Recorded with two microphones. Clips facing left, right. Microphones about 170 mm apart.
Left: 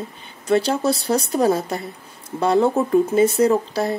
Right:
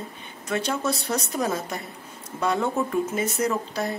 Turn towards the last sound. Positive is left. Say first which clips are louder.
# left 7 dB
turn(degrees=30)  # may be behind; listen again after turning